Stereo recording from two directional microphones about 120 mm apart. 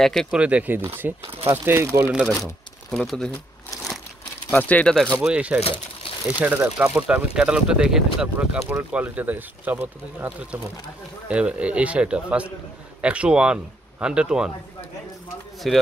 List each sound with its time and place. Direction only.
0.0 s speech: centre (ahead or behind)
0.4 s speech: 10° right (ahead or behind)
2.9 s speech: 5° left (ahead or behind)
4.5 s speech: 15° left (ahead or behind)
5.2 s speech: 10° right (ahead or behind)
5.6 s crumpling: 50° left (ahead or behind)
6.4 s speech: 15° right (ahead or behind)
15.7 s speech: centre (ahead or behind)